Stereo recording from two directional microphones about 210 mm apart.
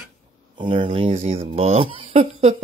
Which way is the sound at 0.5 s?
25° right (ahead or behind).